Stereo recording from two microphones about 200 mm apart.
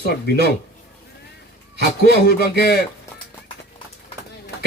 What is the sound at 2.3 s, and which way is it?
Speech, 55° left (ahead or behind).